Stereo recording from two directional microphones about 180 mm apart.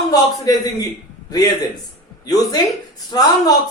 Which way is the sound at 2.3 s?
20° left (ahead or behind).